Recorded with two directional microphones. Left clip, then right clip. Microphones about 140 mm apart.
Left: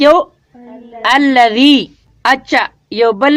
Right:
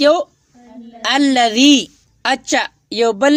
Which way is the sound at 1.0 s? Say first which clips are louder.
Left 5 dB; 40° right (ahead or behind).